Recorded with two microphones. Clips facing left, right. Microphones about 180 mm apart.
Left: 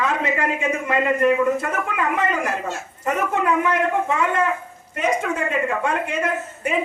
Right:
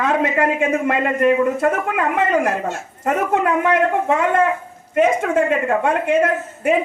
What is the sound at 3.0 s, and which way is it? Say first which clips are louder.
A woman's voice: right 3 dB; 50° right (ahead or behind).